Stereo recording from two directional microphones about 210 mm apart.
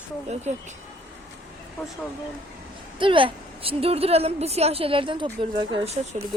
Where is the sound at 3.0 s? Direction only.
25° right (ahead or behind).